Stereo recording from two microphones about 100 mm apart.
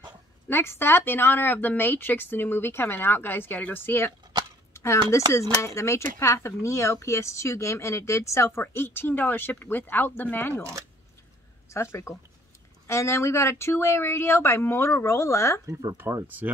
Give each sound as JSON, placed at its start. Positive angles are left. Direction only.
{"t": 0.5, "sound": "speech", "side_deg": 25}
{"t": 11.7, "sound": "speech", "side_deg": 25}
{"t": 15.6, "sound": "speech", "side_deg": -35}
{"t": 16.3, "sound": "speech", "side_deg": -15}